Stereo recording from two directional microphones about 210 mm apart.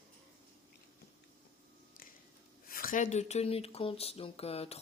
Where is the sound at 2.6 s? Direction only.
45° left (ahead or behind).